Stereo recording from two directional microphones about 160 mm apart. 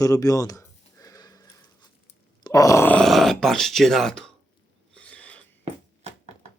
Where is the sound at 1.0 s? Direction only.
25° left (ahead or behind).